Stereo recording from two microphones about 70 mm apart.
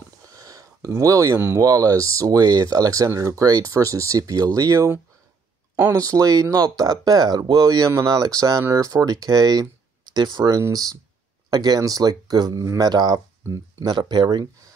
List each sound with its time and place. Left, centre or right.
0.2 s a sound: right
1.6 s speech: right
10.7 s speech: right